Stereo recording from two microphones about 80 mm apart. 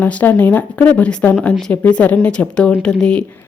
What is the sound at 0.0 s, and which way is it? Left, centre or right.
Speech, left.